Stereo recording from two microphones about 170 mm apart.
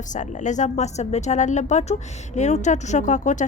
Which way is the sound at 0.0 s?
45° left (ahead or behind).